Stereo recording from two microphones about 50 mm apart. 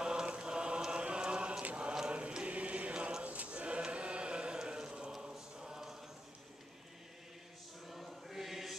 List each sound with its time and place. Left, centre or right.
0.0 s chant: centre
5.3 s choir: centre
7.8 s chant: centre